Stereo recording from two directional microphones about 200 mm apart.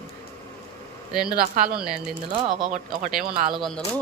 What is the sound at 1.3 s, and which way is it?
Speech, 50° right (ahead or behind).